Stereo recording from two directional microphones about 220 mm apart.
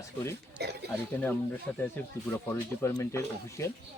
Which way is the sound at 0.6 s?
45° right (ahead or behind).